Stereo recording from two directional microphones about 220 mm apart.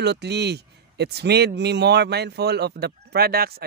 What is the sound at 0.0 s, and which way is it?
Speech, 50° right (ahead or behind).